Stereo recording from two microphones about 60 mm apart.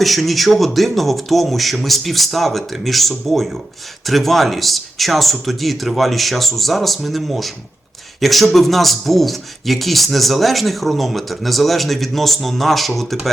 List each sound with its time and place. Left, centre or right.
0.0 s speech: centre